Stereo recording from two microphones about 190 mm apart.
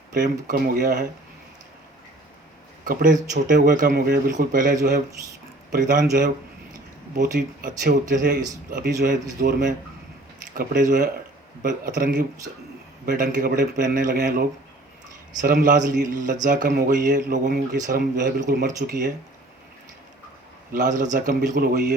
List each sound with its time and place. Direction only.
0.1 s speech: 45° right (ahead or behind)
2.8 s speech: 45° right (ahead or behind)
20.7 s speech: 45° right (ahead or behind)